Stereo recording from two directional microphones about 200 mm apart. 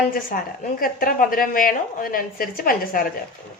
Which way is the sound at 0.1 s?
45° left (ahead or behind).